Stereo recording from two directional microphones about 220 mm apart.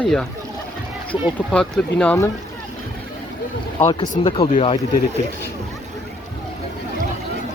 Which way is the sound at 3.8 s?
25° left (ahead or behind).